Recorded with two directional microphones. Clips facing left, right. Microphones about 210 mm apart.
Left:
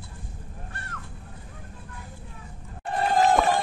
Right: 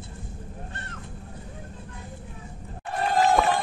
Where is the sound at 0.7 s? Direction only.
20° right (ahead or behind).